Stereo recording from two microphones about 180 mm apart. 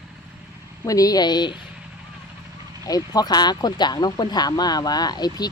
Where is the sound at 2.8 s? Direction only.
20° left (ahead or behind).